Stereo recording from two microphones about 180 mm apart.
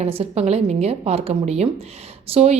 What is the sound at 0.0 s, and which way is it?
A woman's voice, 35° right (ahead or behind).